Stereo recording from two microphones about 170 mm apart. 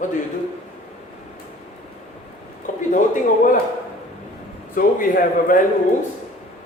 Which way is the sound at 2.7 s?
45° left (ahead or behind).